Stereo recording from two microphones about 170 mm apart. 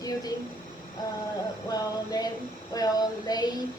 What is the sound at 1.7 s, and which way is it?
Speech, 25° left (ahead or behind).